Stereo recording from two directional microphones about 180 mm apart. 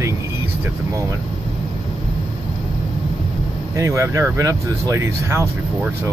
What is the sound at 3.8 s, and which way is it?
Speech, 15° right (ahead or behind).